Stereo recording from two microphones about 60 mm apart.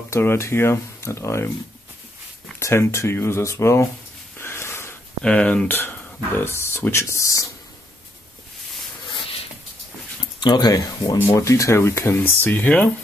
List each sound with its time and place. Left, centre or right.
0.2 s speech: left
2.6 s speech: left
4.4 s a sound: left
5.2 s speech: centre
5.7 s speech: left
10.7 s speech: left
11.1 s speech: left
12.1 s speech: left